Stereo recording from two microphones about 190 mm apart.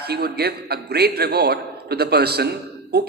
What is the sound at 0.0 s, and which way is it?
A man's voice, 55° right (ahead or behind).